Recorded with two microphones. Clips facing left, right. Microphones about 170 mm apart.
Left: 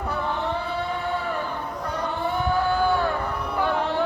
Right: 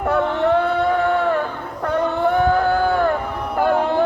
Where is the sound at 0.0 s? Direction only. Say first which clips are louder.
Right 9 dB; 70° right (ahead or behind).